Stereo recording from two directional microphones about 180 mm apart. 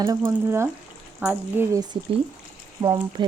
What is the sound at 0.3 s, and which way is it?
Speech, 15° right (ahead or behind).